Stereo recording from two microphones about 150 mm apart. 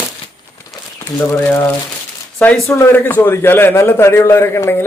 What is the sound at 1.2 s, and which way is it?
Speech, 15° left (ahead or behind).